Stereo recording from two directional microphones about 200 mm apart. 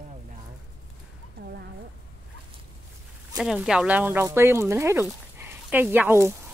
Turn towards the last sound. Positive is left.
turn(degrees=-10)  # may be behind; listen again after turning